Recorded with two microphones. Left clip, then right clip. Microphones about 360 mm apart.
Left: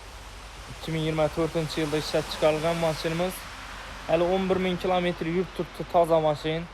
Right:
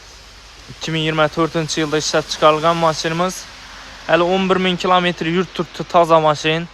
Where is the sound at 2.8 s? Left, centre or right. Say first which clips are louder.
Right 10 dB; right.